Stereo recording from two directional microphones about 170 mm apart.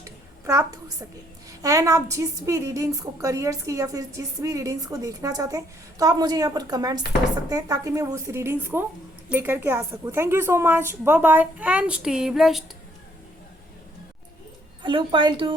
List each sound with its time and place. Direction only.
0.4 s a woman's voice: 20° right (ahead or behind); by 12.6 s centre (ahead or behind)
14.8 s a woman's voice: 30° right (ahead or behind)